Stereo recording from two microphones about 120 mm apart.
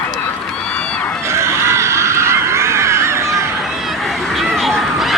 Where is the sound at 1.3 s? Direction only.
20° right (ahead or behind).